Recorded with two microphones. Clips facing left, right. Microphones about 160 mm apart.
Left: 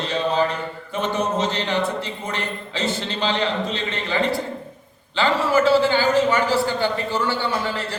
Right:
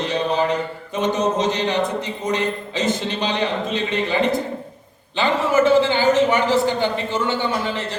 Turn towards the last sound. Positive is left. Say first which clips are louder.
# right 1 dB
turn(degrees=-20)  # may be behind; listen again after turning